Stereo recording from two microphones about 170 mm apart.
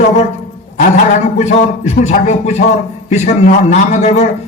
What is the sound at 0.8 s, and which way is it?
A man's voice, 45° left (ahead or behind).